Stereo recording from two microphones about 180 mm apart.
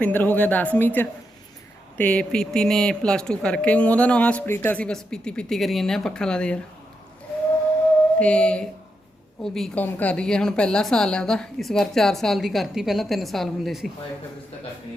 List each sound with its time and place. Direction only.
0.0 s a woman's voice: 10° left (ahead or behind)
8.2 s speech: 5° left (ahead or behind)